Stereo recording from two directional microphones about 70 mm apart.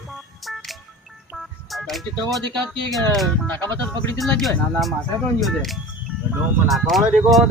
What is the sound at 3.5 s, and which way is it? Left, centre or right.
Speech, left.